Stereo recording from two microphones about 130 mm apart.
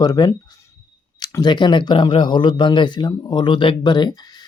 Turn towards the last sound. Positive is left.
turn(degrees=30)  # may be behind; listen again after turning